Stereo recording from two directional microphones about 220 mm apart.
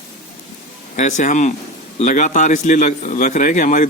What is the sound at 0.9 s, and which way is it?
A man's voice, 35° left (ahead or behind).